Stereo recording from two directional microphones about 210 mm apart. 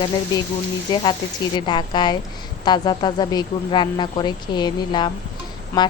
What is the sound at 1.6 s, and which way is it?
A woman's voice, 20° left (ahead or behind).